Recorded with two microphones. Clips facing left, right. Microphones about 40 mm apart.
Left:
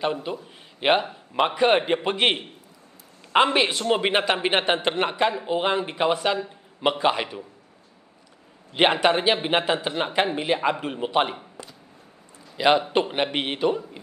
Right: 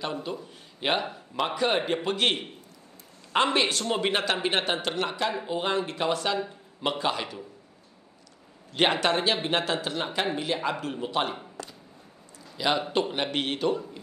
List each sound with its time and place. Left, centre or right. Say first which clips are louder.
0.0 s a man's voice: left 5 dB; left
8.7 s a man's voice: left 4 dB; left
11.6 s a sound: right 1 dB; centre
12.5 s a man's voice: left 6 dB; left